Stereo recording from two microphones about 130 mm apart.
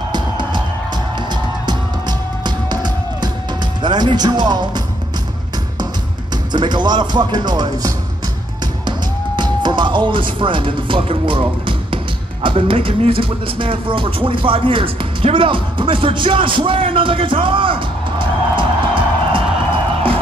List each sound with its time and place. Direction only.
0.1 s music: 35° right (ahead or behind)
3.8 s speech: 35° right (ahead or behind)
6.3 s speech: 35° right (ahead or behind)
9.4 s music: 35° right (ahead or behind)
12.4 s speech: 45° right (ahead or behind)